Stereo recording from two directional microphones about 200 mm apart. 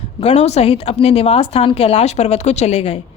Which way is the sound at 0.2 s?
30° left (ahead or behind).